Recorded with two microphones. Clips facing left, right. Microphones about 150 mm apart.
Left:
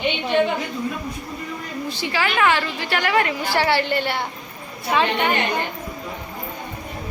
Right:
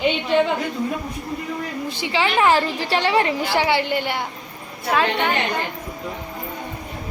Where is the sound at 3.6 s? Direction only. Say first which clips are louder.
Left 3 dB; 15° right (ahead or behind).